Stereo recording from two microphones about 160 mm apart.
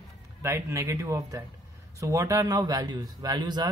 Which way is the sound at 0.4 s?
15° right (ahead or behind).